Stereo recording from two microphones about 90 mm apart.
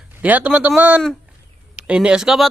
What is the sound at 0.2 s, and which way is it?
Speech, 15° right (ahead or behind).